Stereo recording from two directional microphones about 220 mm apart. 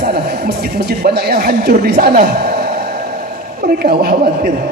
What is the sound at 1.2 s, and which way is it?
A man's voice, 45° right (ahead or behind).